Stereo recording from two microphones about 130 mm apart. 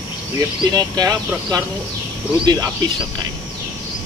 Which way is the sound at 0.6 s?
30° right (ahead or behind).